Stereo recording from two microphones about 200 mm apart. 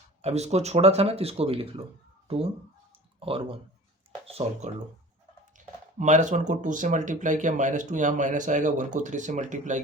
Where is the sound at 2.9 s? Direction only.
25° right (ahead or behind).